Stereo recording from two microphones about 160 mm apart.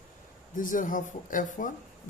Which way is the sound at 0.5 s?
55° left (ahead or behind).